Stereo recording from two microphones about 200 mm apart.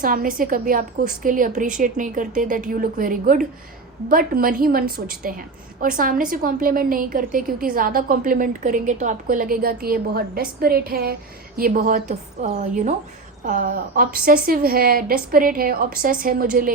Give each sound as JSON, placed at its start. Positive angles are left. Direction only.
{"t": 0.0, "sound": "a woman's voice", "side_deg": -45}